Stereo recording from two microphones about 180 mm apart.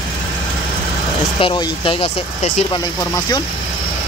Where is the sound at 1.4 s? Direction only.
30° left (ahead or behind).